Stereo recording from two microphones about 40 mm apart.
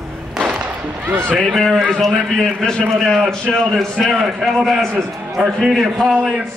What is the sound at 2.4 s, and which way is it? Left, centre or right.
A man's voice, centre.